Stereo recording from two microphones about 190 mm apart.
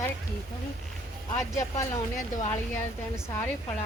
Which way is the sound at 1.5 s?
15° left (ahead or behind).